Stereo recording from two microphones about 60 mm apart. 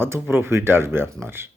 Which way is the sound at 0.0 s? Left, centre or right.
Right.